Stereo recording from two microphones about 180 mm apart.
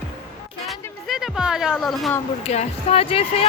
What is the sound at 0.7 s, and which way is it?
Music, centre (ahead or behind).